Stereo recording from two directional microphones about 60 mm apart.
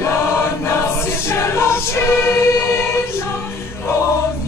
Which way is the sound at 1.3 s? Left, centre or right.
Left.